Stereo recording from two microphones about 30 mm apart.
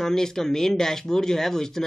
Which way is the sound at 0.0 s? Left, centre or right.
Centre.